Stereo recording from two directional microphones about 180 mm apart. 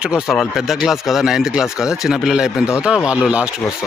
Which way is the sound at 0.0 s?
5° right (ahead or behind).